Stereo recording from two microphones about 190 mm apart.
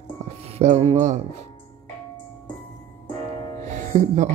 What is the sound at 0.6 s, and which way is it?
Speech, 35° right (ahead or behind).